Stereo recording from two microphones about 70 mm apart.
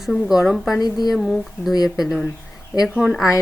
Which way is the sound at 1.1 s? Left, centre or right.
Centre.